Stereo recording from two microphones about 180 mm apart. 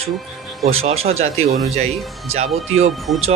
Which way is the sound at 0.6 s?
35° right (ahead or behind).